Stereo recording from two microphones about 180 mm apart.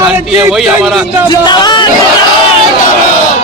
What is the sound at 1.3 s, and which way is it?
Music, 25° left (ahead or behind).